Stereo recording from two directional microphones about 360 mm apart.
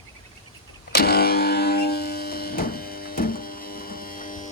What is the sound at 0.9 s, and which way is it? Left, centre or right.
Music, left.